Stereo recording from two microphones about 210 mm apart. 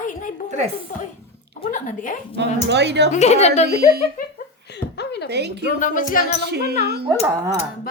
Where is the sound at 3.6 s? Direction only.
50° right (ahead or behind).